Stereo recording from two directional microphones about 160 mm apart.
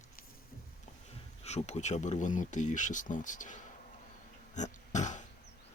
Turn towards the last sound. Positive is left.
turn(degrees=50)  # may be behind; listen again after turning